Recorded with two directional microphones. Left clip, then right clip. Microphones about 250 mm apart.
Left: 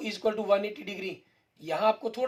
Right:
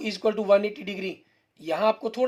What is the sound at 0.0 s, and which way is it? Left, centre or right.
Speech, right.